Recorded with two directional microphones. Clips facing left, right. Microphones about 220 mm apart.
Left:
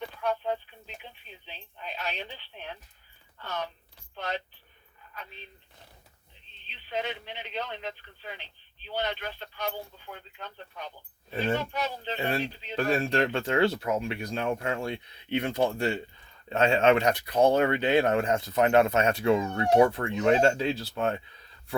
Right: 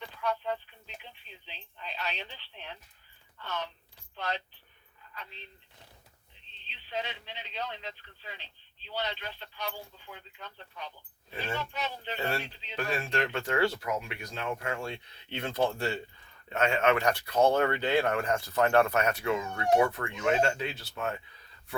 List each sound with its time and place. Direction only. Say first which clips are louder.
0.2 s a sound: left 2 dB; 40° left (ahead or behind)
1.5 s speech: left 3 dB; 45° left (ahead or behind)
3.4 s speech: left 2 dB; 40° left (ahead or behind)
6.9 s speech: left 4 dB; 55° left (ahead or behind)
12.0 s speech: left 3 dB; 20° left (ahead or behind)
12.6 s speech: left 8 dB; 35° left (ahead or behind); by 16.0 s 15° left (ahead or behind)
16.5 s speech: left 4 dB; 30° left (ahead or behind)